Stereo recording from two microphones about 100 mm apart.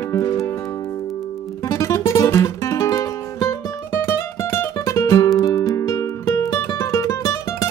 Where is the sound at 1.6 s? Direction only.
35° left (ahead or behind).